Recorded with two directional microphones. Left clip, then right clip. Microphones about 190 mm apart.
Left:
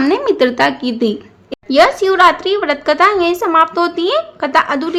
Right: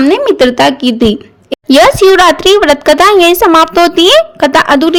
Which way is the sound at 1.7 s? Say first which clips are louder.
Right 7 dB; 45° right (ahead or behind).